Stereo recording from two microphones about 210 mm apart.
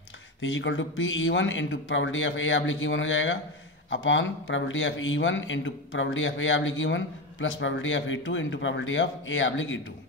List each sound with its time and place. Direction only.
0.4 s a man's voice: 65° left (ahead or behind)